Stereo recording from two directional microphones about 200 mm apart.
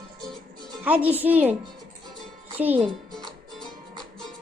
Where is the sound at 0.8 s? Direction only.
10° right (ahead or behind).